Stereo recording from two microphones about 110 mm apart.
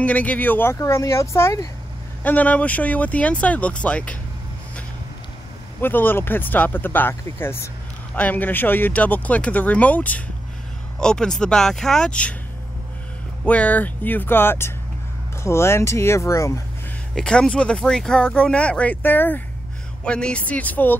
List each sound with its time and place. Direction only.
0.0 s speech: 15° left (ahead or behind)
2.2 s speech: 15° left (ahead or behind)
5.8 s speech: 20° left (ahead or behind)
13.5 s speech: 15° left (ahead or behind)
17.1 s speech: 5° left (ahead or behind)